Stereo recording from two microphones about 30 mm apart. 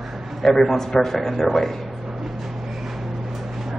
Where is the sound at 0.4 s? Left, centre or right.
Centre.